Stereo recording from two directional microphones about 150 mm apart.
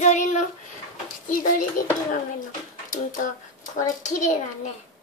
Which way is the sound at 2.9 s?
60° left (ahead or behind).